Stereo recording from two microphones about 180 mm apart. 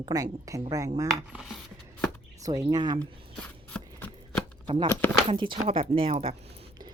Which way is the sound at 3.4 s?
5° left (ahead or behind).